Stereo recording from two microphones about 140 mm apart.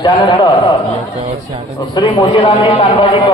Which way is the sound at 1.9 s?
35° left (ahead or behind).